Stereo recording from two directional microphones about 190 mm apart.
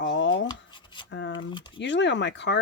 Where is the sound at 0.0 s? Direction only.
75° left (ahead or behind).